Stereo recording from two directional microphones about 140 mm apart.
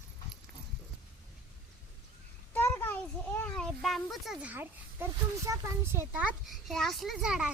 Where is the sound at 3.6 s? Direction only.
Centre (ahead or behind); by 6.3 s 20° right (ahead or behind).